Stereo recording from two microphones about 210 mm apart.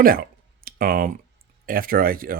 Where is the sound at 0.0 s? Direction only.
45° right (ahead or behind).